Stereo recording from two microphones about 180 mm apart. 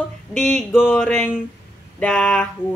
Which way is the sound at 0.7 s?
5° right (ahead or behind).